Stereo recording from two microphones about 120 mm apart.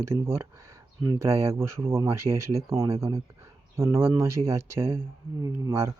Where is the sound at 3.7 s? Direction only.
25° right (ahead or behind).